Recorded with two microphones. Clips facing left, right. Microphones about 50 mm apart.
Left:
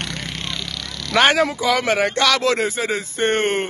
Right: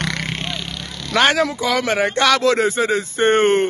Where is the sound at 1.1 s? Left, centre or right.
Centre.